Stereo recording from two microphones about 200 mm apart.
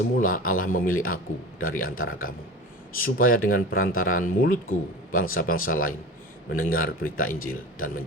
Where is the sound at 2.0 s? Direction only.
90° left.